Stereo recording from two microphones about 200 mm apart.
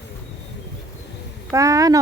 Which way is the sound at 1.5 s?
15° right (ahead or behind).